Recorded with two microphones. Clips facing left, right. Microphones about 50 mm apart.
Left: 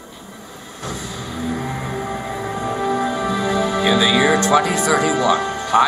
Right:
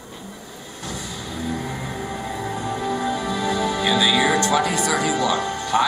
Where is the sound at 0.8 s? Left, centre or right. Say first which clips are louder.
Left 3 dB; centre.